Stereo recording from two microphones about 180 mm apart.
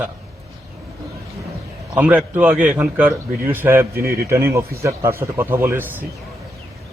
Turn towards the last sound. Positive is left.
turn(degrees=-10)  # may be behind; listen again after turning